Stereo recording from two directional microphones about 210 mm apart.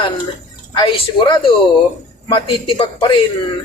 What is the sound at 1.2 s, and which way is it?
A man's voice, 25° left (ahead or behind).